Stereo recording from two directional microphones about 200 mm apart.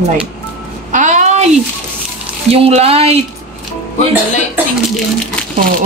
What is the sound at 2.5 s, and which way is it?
Speech, 30° right (ahead or behind).